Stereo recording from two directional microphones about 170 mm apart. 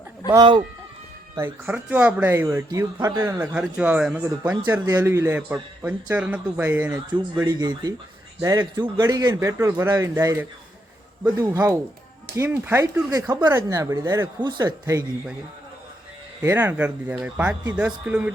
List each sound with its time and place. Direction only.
0.3 s speech: 30° right (ahead or behind)
1.4 s speech: 10° right (ahead or behind)
7.4 s speech: 25° right (ahead or behind)
16.4 s speech: 15° right (ahead or behind)